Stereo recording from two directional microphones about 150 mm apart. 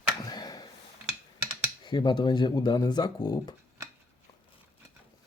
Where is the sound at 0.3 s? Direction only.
25° left (ahead or behind).